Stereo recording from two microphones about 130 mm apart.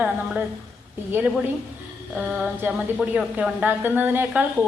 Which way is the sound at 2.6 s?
10° right (ahead or behind).